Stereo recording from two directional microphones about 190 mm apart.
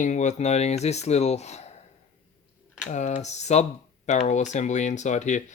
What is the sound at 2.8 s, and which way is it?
Speech, 40° left (ahead or behind).